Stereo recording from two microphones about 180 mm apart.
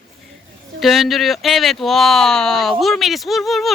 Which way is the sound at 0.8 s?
Centre (ahead or behind).